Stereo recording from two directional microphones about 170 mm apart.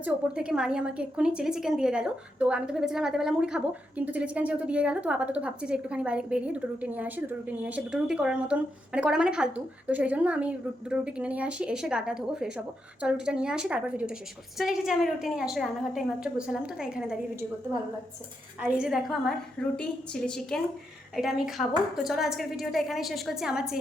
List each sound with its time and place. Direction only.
0.0 s a woman's voice: 5° right (ahead or behind)
18.6 s a woman's voice: 5° right (ahead or behind)